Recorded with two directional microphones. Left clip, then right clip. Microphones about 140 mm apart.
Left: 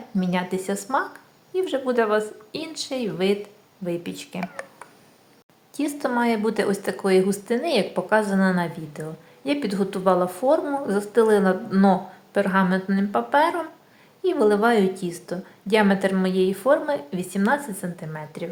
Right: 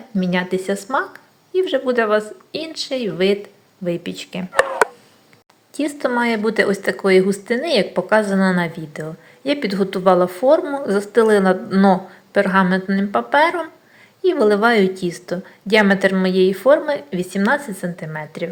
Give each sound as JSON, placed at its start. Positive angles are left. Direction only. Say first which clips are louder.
{"t": 0.2, "sound": "a woman's voice", "louder": "right 5 dB", "side_deg": -20}
{"t": 5.7, "sound": "a woman's voice", "louder": "right 5 dB", "side_deg": -15}